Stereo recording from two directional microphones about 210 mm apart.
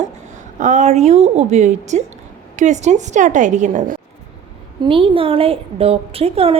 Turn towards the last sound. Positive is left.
turn(degrees=-30)  # may be behind; listen again after turning